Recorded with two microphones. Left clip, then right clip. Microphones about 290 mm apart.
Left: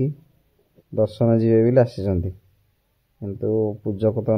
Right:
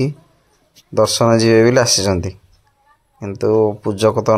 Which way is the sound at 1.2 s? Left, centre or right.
Centre.